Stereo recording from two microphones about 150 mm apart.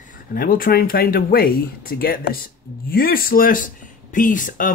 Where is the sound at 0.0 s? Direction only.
70° left (ahead or behind).